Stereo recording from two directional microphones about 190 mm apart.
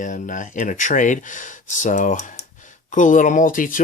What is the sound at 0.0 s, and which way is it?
Speech, 45° left (ahead or behind).